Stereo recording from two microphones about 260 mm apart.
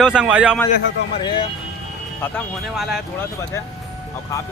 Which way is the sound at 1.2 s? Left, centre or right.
Centre.